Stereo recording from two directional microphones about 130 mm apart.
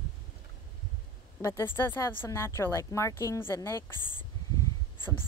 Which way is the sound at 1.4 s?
20° left (ahead or behind).